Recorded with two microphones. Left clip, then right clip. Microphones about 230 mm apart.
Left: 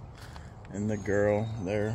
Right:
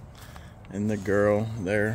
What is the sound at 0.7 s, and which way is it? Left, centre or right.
Speech, right.